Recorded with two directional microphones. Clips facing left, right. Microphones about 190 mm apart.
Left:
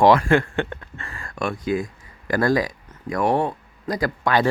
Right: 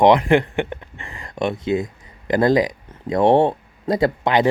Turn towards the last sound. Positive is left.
turn(degrees=-20)  # may be behind; listen again after turning